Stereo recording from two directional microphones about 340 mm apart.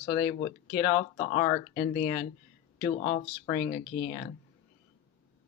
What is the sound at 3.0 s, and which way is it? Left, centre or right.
Speech, centre.